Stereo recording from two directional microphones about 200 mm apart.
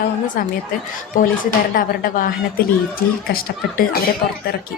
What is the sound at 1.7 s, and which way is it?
A woman's voice, 45° left (ahead or behind).